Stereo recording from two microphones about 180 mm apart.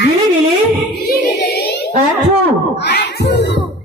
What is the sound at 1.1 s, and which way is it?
Choir, 60° left (ahead or behind).